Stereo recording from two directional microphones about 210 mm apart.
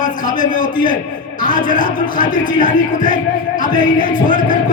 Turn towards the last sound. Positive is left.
turn(degrees=40)  # may be behind; listen again after turning